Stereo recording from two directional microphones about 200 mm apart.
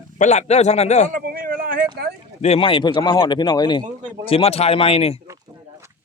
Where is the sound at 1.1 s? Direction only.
45° right (ahead or behind).